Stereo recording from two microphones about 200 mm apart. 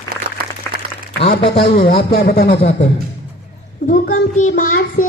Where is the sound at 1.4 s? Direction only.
30° left (ahead or behind).